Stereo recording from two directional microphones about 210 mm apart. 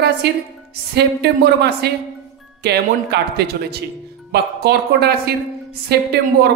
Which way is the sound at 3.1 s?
50° right (ahead or behind).